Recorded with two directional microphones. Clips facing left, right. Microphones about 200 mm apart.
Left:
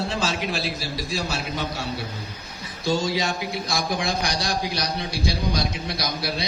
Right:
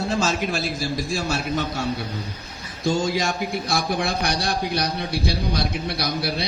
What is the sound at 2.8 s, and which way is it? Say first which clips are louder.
A man's voice: right 2 dB; 50° right (ahead or behind).